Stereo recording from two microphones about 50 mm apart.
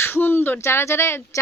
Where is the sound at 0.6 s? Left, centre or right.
Left.